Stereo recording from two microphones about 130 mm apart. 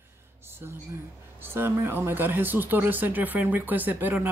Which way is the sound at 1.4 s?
20° right (ahead or behind).